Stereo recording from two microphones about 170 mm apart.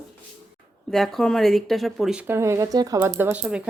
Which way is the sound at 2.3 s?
15° right (ahead or behind).